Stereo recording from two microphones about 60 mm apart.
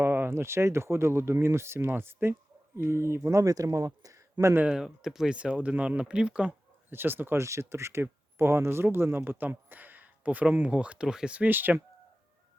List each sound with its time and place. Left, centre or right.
0.0 s speech: right
4.7 s speech: centre
5.4 s speech: centre
6.9 s speech: right
7.4 s speech: right; by 11.3 s centre
11.3 s speech: right